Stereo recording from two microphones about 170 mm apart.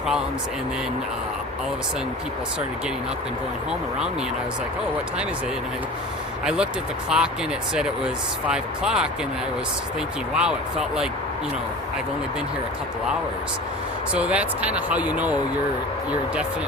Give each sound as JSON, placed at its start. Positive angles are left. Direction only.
{"t": 6.4, "sound": "speech", "side_deg": -5}
{"t": 10.3, "sound": "speech", "side_deg": -5}
{"t": 14.1, "sound": "speech", "side_deg": -5}